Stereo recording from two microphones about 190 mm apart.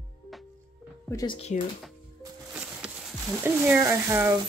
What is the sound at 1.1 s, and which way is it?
Speech, 20° left (ahead or behind).